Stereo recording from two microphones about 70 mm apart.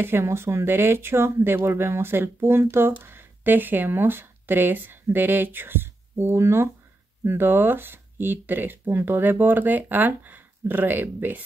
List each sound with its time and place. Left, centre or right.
0.0 s speech: right